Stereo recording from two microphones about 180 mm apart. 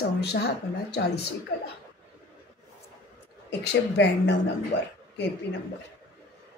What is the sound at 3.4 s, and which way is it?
Speech, 75° left (ahead or behind).